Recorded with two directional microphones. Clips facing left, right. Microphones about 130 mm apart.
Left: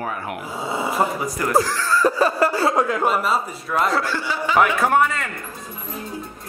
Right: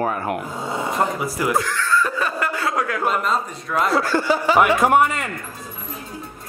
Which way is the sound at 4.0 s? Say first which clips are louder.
Right 5 dB; 45° right (ahead or behind).